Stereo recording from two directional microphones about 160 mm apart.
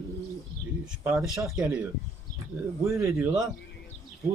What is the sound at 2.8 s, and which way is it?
Speech, 15° right (ahead or behind).